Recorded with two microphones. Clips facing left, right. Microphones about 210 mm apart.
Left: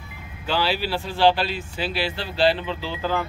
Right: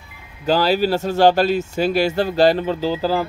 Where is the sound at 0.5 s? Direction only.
40° right (ahead or behind).